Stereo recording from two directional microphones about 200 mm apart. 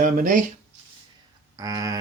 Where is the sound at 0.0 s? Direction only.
40° right (ahead or behind).